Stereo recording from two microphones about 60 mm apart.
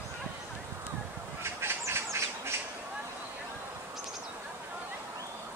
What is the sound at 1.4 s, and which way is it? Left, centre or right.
Squawk, right.